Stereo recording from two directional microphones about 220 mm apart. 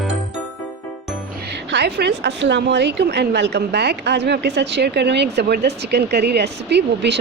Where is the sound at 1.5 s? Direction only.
50° right (ahead or behind).